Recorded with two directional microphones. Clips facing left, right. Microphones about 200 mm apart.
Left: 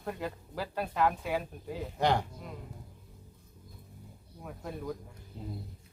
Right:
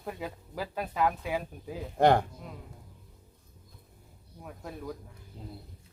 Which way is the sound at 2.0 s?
55° right (ahead or behind).